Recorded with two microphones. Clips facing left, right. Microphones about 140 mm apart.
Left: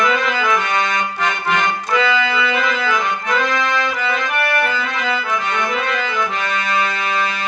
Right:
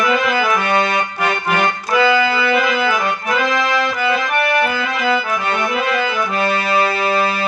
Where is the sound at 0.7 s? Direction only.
30° right (ahead or behind).